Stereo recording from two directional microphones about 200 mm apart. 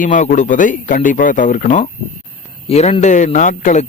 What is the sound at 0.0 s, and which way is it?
Speech, 40° left (ahead or behind).